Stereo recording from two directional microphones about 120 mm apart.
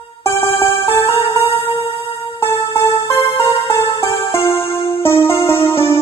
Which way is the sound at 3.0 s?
50° left (ahead or behind).